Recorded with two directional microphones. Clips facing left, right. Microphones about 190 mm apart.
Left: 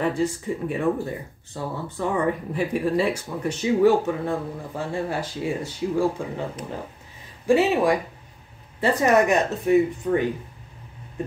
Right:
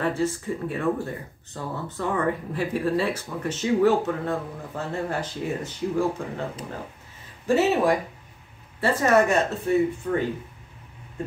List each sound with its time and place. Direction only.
0.0 s speech: 15° left (ahead or behind)
7.4 s speech: 15° left (ahead or behind)